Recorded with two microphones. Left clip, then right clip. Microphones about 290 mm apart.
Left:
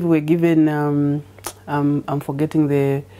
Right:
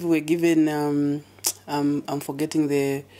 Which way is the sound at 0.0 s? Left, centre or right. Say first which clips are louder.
Left 4 dB; left.